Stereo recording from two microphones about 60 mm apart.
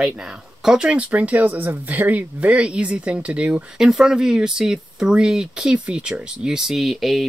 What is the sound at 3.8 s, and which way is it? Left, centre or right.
Speech, centre.